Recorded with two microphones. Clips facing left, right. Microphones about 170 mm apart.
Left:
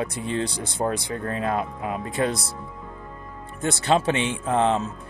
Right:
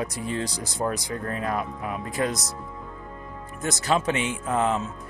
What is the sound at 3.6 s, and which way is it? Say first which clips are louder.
Speech: left 3 dB; 30° left (ahead or behind).